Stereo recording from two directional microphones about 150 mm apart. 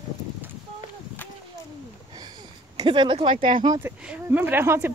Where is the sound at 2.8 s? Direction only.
35° right (ahead or behind).